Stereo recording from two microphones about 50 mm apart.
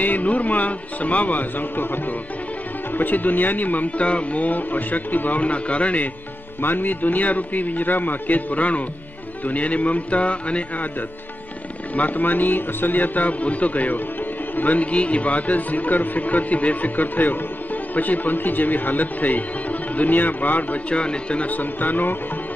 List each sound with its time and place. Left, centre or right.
0.0 s speech: left
6.6 s speech: left
11.9 s speech: left
20.9 s speech: centre
21.5 s speech: left